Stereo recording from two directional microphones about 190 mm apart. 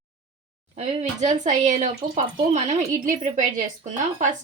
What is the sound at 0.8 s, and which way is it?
A woman's voice, 40° right (ahead or behind).